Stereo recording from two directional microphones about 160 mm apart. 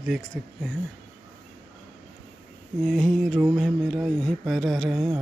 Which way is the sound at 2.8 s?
5° left (ahead or behind).